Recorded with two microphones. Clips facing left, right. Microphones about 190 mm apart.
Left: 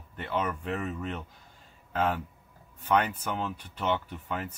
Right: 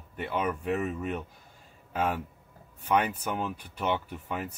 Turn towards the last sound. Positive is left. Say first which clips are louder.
# even
turn(degrees=-10)  # may be behind; listen again after turning